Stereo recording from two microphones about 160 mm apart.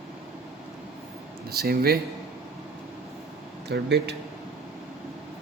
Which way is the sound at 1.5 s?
75° right (ahead or behind).